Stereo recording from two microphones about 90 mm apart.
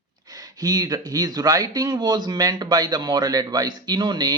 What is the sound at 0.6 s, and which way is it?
Speech, 45° right (ahead or behind).